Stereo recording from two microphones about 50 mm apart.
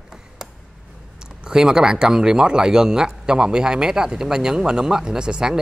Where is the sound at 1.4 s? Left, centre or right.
Centre.